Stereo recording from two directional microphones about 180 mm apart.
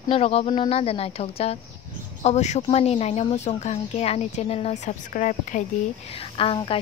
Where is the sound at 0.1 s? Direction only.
30° left (ahead or behind).